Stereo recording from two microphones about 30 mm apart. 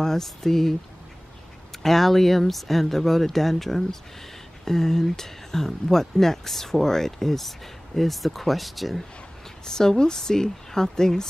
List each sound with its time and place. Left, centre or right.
0.0 s speech: centre
1.8 s speech: centre
9.7 s speech: left